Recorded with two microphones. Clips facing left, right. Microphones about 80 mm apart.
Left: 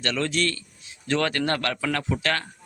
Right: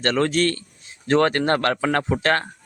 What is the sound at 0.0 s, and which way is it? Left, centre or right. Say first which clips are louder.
Speech: right 6 dB; right.